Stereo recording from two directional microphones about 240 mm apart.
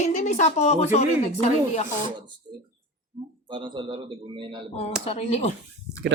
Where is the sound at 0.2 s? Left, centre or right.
Left.